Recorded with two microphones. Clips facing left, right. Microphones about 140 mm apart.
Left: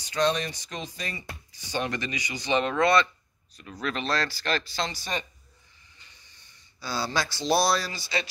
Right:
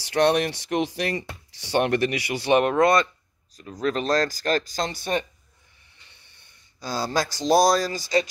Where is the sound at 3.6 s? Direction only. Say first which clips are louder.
Right 6 dB; 35° right (ahead or behind); by 5.2 s 55° right (ahead or behind).